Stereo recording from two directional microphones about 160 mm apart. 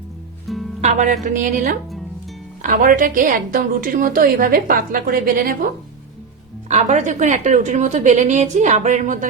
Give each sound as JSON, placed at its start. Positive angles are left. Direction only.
{"t": 0.8, "sound": "a woman's voice", "side_deg": -45}
{"t": 6.7, "sound": "a woman's voice", "side_deg": -45}